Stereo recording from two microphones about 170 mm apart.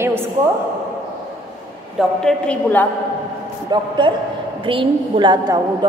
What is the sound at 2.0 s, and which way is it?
Speech, 5° left (ahead or behind).